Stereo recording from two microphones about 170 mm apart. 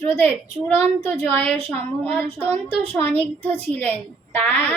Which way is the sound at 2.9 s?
10° left (ahead or behind).